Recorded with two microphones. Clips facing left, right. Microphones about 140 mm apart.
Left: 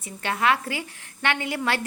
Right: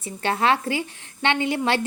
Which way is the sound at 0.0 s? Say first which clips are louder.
Right 2 dB; 30° right (ahead or behind).